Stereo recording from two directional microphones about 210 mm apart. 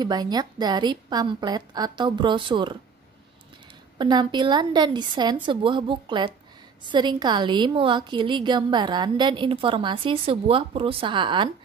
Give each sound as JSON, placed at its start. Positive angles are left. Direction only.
{"t": 0.0, "sound": "a woman's voice", "side_deg": -20}
{"t": 4.0, "sound": "a woman's voice", "side_deg": -20}